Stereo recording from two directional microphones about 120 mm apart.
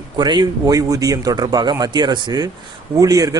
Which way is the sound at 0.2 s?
35° right (ahead or behind).